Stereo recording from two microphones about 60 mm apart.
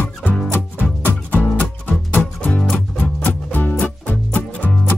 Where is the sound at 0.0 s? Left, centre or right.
Left.